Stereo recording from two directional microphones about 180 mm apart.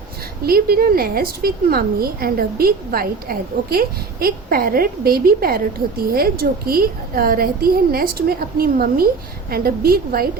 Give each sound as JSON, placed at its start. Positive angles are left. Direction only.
{"t": 0.4, "sound": "a woman's voice", "side_deg": -55}